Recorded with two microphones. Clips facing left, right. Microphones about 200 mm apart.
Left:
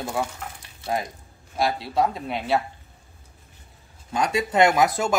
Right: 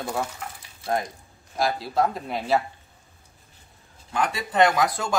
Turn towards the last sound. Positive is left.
turn(degrees=10)  # may be behind; listen again after turning